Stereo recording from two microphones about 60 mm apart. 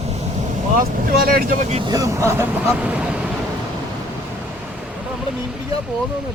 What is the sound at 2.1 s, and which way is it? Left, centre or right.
Speech, right.